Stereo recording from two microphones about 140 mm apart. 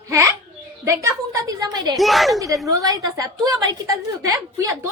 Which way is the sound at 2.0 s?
Centre (ahead or behind).